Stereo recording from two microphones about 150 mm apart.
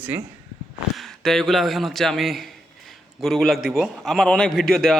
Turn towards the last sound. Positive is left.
turn(degrees=0)  # may be behind; listen again after turning